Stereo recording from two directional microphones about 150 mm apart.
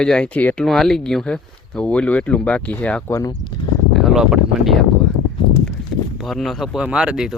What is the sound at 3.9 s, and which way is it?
Speech, centre (ahead or behind).